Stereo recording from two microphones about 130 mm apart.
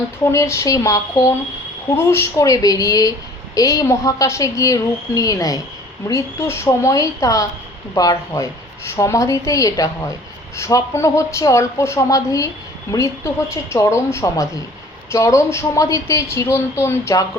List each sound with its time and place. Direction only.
0.3 s a woman's voice: 20° left (ahead or behind)